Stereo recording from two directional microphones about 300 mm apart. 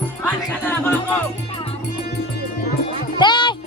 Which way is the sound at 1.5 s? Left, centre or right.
Centre.